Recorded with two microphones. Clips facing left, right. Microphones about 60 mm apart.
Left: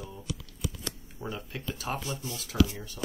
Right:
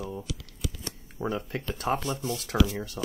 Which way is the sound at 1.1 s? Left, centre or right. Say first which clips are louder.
Right 9 dB; right.